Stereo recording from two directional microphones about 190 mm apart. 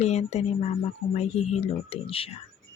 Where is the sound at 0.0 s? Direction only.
35° left (ahead or behind).